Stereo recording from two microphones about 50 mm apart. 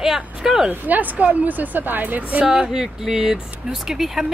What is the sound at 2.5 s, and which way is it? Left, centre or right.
A woman's voice, centre.